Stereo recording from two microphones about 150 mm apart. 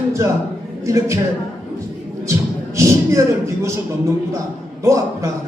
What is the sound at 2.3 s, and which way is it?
Music, 20° right (ahead or behind).